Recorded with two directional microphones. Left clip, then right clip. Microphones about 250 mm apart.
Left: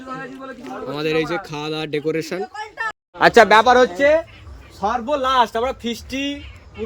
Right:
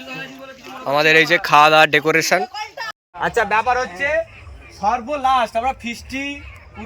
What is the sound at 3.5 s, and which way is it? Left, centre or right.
Speech, left.